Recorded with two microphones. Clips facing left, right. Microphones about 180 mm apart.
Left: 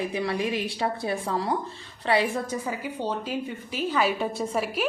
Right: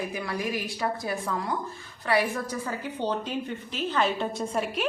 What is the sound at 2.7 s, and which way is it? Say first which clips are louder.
A woman's voice: even; 5° left (ahead or behind).